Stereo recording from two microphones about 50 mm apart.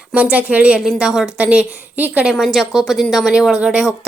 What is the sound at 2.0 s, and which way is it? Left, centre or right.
Speech, right.